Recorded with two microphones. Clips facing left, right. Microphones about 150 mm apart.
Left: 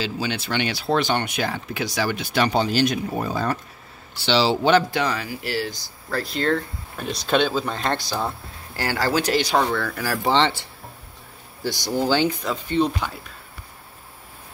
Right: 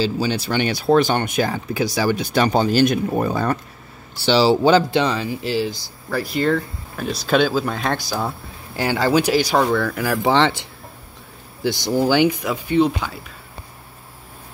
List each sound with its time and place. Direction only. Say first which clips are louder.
0.0 s speech: right 6 dB; 35° right (ahead or behind); by 3.5 s 55° right (ahead or behind)
4.3 s speech: right 4 dB; 40° right (ahead or behind); by 5.8 s 20° right (ahead or behind)
6.0 s speech: right 3 dB; 5° right (ahead or behind)
8.7 s speech: right 5 dB; 20° right (ahead or behind)
12.0 s speech: right 4 dB; 15° right (ahead or behind)